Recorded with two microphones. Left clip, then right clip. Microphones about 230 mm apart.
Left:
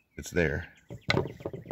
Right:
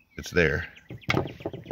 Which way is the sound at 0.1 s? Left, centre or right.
Centre.